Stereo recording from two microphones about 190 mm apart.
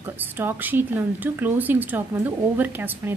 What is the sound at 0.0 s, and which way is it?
A woman's voice, 10° right (ahead or behind).